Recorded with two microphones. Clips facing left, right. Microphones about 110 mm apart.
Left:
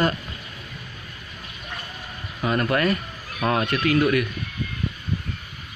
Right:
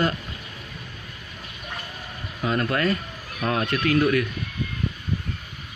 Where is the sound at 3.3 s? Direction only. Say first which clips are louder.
Left 2 dB; 90° left.